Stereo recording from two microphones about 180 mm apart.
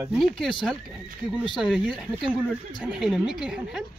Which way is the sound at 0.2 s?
Centre (ahead or behind).